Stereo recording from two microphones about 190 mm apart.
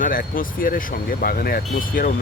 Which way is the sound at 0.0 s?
45° left (ahead or behind).